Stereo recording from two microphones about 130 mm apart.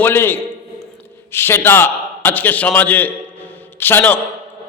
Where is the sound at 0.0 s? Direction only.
15° left (ahead or behind).